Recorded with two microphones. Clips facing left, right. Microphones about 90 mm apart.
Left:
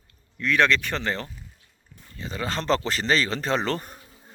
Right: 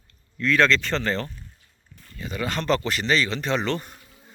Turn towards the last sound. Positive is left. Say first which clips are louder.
# even
turn(degrees=35)  # may be behind; listen again after turning